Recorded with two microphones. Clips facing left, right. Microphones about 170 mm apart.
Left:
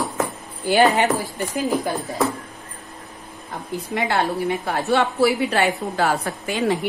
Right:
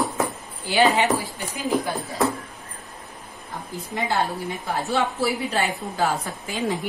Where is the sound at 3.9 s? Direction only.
65° left (ahead or behind).